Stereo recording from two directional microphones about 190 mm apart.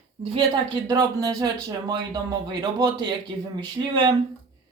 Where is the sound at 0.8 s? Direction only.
20° right (ahead or behind).